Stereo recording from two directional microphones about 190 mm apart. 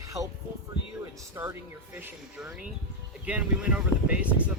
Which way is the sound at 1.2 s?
10° right (ahead or behind).